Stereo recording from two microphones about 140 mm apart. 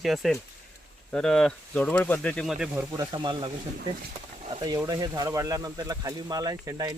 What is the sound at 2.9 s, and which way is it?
Speech, 35° right (ahead or behind).